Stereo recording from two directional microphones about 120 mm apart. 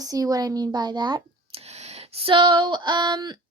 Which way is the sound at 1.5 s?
60° right (ahead or behind).